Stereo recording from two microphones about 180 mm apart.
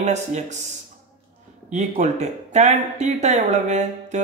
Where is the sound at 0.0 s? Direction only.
40° right (ahead or behind).